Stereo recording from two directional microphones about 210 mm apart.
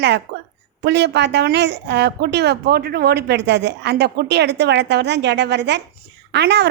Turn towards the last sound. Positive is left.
turn(degrees=-55)  # may be behind; listen again after turning